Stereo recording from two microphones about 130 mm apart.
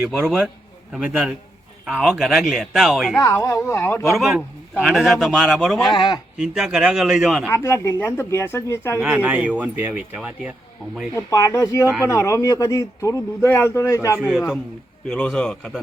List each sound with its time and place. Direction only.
0.0 s speech: 10° right (ahead or behind)
3.2 s speech: 25° left (ahead or behind)
4.1 s speech: 5° right (ahead or behind)
5.9 s speech: 35° left (ahead or behind)
6.3 s speech: 5° right (ahead or behind)
7.5 s speech: 20° left (ahead or behind)
9.0 s speech: 10° right (ahead or behind)
11.1 s speech: 25° left (ahead or behind)
14.3 s speech: centre (ahead or behind)
15.1 s speech: 10° left (ahead or behind)